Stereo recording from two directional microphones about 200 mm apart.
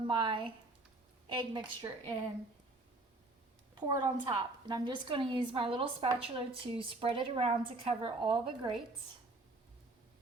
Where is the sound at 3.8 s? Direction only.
20° right (ahead or behind).